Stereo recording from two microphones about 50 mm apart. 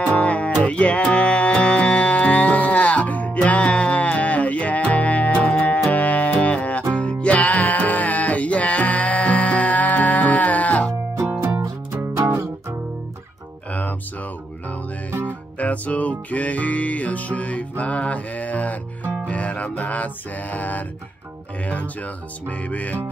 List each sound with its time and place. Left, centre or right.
0.1 s music: left
13.7 s music: left
15.6 s music: left